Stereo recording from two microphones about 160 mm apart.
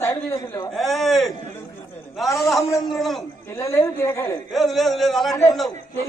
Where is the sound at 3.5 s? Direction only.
20° left (ahead or behind).